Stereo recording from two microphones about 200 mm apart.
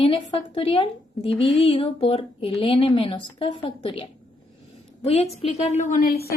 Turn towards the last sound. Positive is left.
turn(degrees=45)  # may be behind; listen again after turning